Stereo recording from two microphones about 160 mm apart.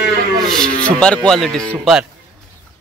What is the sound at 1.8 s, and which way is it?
Speech, 5° right (ahead or behind).